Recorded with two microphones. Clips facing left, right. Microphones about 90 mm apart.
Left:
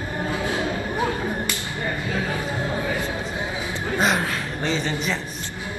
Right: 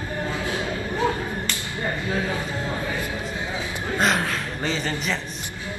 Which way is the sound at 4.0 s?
Centre (ahead or behind).